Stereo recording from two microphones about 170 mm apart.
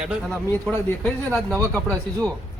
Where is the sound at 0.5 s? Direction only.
15° left (ahead or behind).